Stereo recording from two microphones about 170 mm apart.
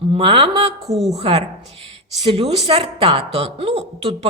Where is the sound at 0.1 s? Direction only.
30° right (ahead or behind).